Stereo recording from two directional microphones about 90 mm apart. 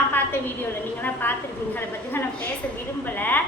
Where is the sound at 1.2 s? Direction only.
20° left (ahead or behind).